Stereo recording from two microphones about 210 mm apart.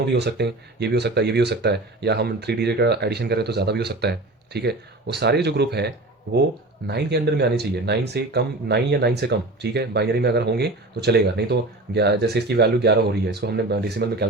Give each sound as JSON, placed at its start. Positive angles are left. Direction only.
{"t": 0.0, "sound": "speech", "side_deg": -55}